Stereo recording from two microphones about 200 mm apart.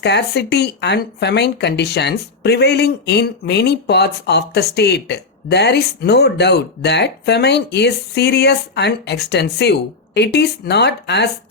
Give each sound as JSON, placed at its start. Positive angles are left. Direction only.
{"t": 0.0, "sound": "speech", "side_deg": 55}